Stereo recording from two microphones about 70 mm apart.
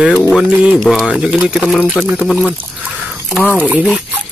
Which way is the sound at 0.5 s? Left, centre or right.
Right.